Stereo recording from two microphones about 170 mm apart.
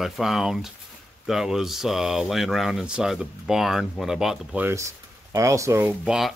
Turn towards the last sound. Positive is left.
turn(degrees=-15)  # may be behind; listen again after turning